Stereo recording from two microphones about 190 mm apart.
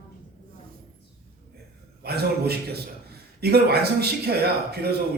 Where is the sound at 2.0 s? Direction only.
55° right (ahead or behind).